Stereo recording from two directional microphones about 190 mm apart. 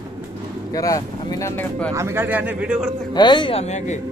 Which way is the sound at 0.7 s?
15° left (ahead or behind).